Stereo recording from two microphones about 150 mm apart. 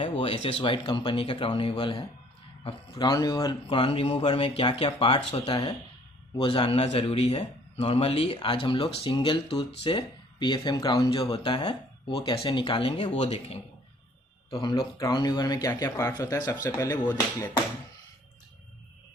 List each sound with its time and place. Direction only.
0.0 s a man's voice: 40° left (ahead or behind)
3.7 s a man's voice: 35° left (ahead or behind)
14.6 s speech: 30° left (ahead or behind)
16.5 s speech: 10° left (ahead or behind)